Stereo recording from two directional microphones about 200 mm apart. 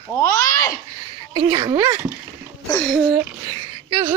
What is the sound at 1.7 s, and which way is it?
Speech, 15° right (ahead or behind).